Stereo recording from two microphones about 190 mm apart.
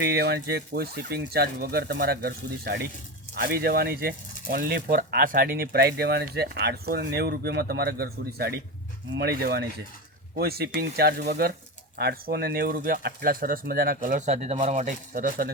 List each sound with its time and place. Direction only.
0.0 s speech: 60° right (ahead or behind)